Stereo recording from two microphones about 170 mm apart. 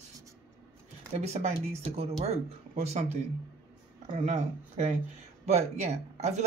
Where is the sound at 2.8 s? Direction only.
40° right (ahead or behind).